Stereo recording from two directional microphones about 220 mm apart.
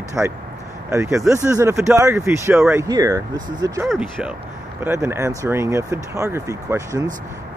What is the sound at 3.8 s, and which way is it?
Speech, 5° right (ahead or behind).